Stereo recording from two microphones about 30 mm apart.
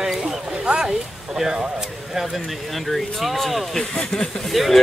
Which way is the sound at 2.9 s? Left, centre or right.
Centre.